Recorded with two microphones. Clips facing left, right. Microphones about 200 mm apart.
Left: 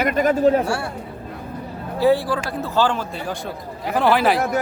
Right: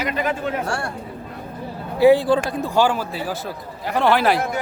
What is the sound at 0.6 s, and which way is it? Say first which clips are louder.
Speech: left 2 dB; 5° left (ahead or behind).